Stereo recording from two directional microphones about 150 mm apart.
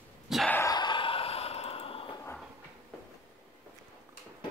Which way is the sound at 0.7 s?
30° left (ahead or behind).